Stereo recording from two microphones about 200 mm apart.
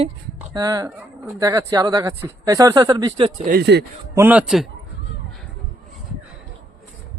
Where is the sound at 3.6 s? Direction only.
55° right (ahead or behind).